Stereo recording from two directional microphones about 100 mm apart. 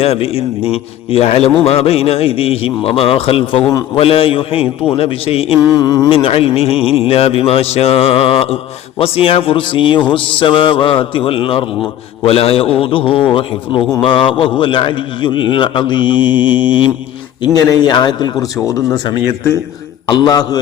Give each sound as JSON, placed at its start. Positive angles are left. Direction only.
{"t": 0.0, "sound": "a man's voice", "side_deg": 80}
{"t": 4.9, "sound": "a man's voice", "side_deg": 75}
{"t": 5.6, "sound": "a man's voice", "side_deg": 40}
{"t": 6.1, "sound": "a man's voice", "side_deg": 70}
{"t": 12.2, "sound": "a man's voice", "side_deg": 75}
{"t": 17.4, "sound": "a man's voice", "side_deg": 40}
{"t": 20.1, "sound": "a man's voice", "side_deg": 45}